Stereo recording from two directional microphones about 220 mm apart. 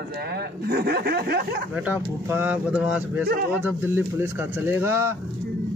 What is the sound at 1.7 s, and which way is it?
Speech, 5° right (ahead or behind).